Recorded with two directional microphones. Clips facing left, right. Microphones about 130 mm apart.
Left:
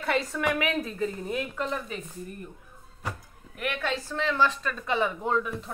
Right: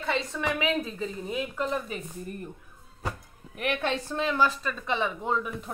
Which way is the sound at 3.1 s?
25° right (ahead or behind).